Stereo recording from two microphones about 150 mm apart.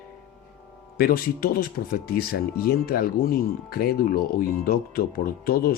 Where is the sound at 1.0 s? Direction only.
85° left.